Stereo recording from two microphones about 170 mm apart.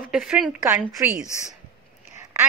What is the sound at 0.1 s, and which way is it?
Speech, 5° right (ahead or behind).